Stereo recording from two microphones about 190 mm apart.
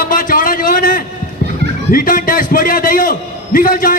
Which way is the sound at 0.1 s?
45° left (ahead or behind).